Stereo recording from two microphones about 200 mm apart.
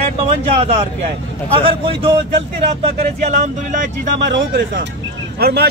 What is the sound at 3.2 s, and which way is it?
Speech, 35° right (ahead or behind).